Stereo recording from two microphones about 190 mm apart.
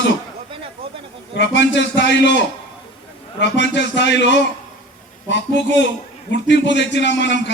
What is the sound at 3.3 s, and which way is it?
A man's voice, 70° left (ahead or behind).